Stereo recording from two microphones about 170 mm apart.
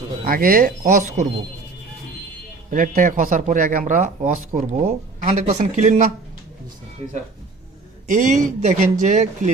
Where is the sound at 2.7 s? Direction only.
55° right (ahead or behind).